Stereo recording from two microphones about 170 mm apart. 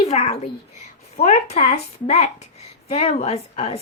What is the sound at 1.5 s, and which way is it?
A woman's voice, 40° left (ahead or behind).